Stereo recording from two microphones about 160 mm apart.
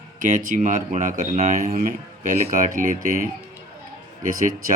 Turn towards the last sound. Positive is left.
turn(degrees=-60)  # may be behind; listen again after turning